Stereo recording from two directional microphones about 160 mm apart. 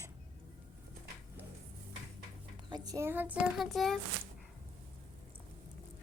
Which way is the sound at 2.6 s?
25° right (ahead or behind).